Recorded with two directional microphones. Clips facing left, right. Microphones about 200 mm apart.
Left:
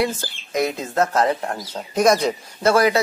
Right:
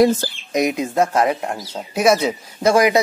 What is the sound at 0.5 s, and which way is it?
A man's voice, 15° right (ahead or behind).